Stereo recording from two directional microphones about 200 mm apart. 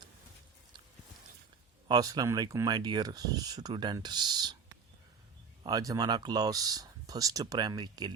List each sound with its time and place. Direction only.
1.9 s speech: 20° right (ahead or behind)
5.6 s speech: 20° right (ahead or behind)